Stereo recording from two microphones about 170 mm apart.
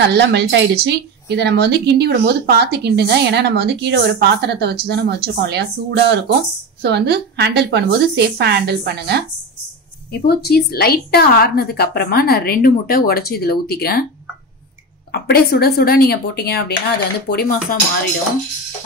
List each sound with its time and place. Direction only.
0.0 s speech: 85° right
10.1 s a woman's voice: 70° left (ahead or behind)
15.1 s a woman's voice: 65° left (ahead or behind)